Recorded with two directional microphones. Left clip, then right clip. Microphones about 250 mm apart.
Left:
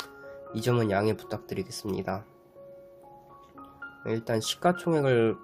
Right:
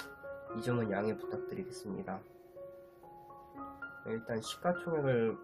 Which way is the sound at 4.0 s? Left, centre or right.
Left.